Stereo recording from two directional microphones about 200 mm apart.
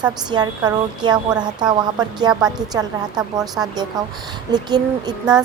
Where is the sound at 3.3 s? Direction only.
20° right (ahead or behind).